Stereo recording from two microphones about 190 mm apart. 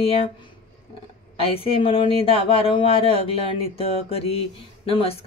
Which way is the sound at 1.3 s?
30° left (ahead or behind).